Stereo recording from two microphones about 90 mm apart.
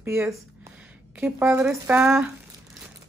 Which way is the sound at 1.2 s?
20° right (ahead or behind).